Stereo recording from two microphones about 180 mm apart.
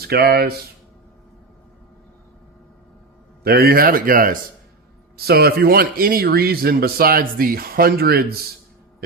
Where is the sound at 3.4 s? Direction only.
60° right (ahead or behind).